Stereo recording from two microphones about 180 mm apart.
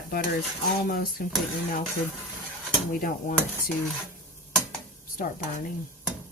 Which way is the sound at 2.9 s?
50° left (ahead or behind).